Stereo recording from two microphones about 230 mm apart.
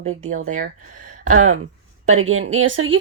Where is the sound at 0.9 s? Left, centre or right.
Right.